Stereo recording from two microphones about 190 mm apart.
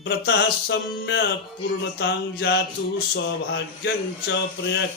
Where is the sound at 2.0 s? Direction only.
60° left (ahead or behind).